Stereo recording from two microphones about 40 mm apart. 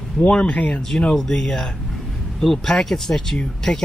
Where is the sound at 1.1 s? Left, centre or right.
Centre.